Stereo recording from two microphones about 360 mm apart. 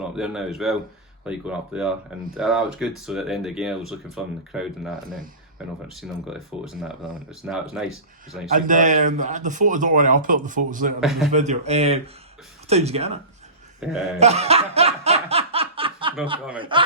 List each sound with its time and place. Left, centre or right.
0.0 s speech: centre
8.5 s speech: right
11.0 s speech: centre
11.3 s speech: centre
13.8 s speech: centre
14.2 s laughter: centre
16.6 s speech: centre